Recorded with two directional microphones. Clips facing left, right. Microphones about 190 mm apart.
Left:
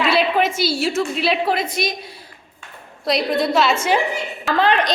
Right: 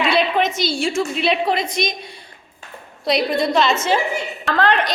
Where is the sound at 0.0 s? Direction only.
5° left (ahead or behind).